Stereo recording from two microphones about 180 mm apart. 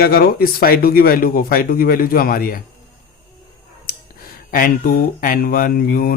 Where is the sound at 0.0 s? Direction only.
55° left (ahead or behind).